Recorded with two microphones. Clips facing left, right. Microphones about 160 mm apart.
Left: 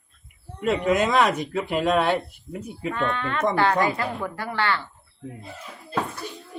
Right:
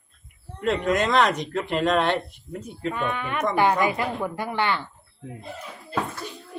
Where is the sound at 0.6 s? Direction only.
5° left (ahead or behind).